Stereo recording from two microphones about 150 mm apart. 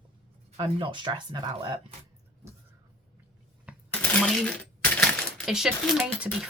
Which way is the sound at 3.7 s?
10° right (ahead or behind).